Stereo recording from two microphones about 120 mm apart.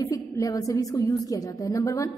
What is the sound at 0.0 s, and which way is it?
A woman's voice, 30° left (ahead or behind).